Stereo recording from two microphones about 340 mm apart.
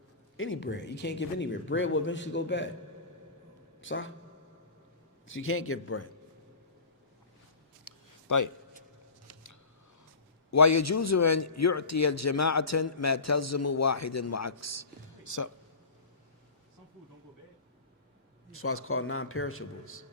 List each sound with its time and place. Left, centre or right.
0.3 s speech: left
3.8 s a man's voice: left
5.3 s speech: left
7.9 s a sound: left
10.5 s a man's voice: left
18.5 s speech: left